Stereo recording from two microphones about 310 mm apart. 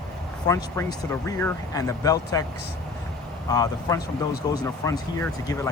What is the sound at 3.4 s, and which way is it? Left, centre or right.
Speech, centre.